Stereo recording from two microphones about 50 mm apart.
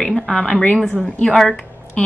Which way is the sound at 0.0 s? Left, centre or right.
Centre.